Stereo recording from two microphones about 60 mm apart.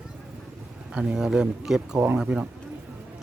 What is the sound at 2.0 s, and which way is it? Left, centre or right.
Speech, right.